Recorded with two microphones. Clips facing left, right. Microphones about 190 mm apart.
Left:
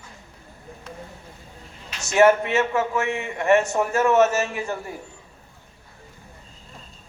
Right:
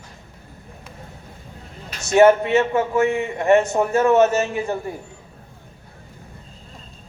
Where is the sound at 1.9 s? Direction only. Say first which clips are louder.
Right 4 dB; 35° right (ahead or behind).